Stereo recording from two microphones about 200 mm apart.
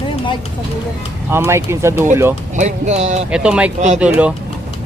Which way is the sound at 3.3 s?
5° right (ahead or behind).